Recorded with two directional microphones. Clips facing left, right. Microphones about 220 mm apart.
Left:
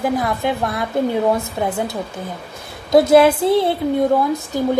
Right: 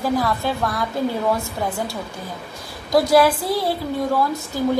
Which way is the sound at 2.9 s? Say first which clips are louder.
Left 4 dB; 25° left (ahead or behind).